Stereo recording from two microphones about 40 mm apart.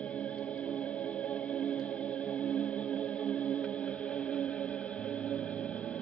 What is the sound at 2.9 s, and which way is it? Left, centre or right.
Music, left.